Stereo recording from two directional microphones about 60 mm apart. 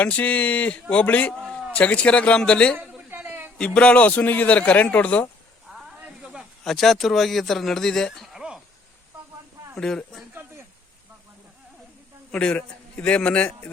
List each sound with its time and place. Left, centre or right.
0.0 s a man's voice: left
3.2 s a sound: right
3.6 s a man's voice: centre
6.1 s snake: centre
6.7 s speech: centre
8.3 s a sound: centre
9.7 s speech: centre
12.3 s a man's voice: centre